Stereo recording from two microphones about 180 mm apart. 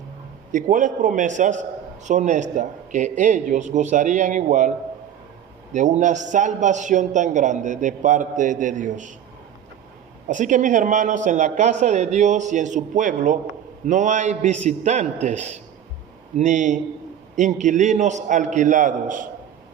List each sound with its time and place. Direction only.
0.5 s a man's voice: 45° right (ahead or behind)
5.7 s a man's voice: 40° right (ahead or behind)
10.2 s a man's voice: 45° right (ahead or behind)